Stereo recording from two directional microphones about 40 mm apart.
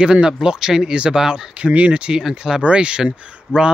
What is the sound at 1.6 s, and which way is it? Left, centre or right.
Speech, right.